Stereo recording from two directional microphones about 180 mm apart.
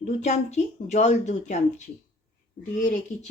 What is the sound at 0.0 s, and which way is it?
Speech, 40° left (ahead or behind).